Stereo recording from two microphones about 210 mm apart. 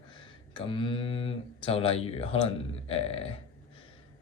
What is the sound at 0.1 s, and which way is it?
Speech, 25° left (ahead or behind).